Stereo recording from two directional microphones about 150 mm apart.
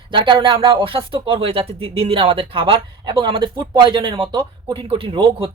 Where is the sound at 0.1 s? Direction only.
35° right (ahead or behind).